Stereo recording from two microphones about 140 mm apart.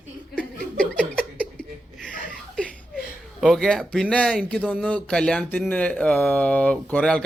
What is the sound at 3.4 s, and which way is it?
A man's voice, centre (ahead or behind).